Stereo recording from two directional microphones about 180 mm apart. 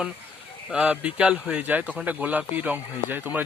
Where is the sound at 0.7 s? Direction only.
5° right (ahead or behind).